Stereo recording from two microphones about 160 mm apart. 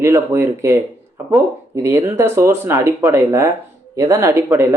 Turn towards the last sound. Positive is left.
turn(degrees=-15)  # may be behind; listen again after turning